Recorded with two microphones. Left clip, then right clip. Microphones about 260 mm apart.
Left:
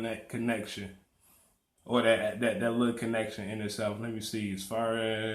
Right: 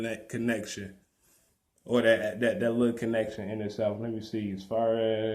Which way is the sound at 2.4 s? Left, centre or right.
Left.